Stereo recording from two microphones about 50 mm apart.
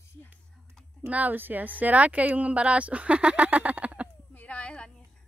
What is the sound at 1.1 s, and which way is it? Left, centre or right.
Speech, right.